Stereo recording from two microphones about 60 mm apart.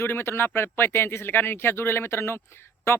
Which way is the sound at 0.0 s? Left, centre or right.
Left.